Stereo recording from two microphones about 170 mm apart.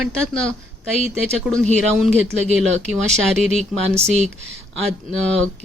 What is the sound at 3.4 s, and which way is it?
Speech, 40° left (ahead or behind).